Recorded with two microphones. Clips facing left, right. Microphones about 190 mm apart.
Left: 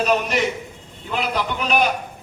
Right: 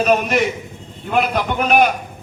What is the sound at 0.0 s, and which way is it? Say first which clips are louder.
A man's voice: right 4 dB; 55° right (ahead or behind).